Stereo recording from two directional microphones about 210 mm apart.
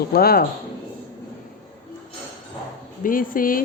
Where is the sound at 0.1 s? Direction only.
45° left (ahead or behind).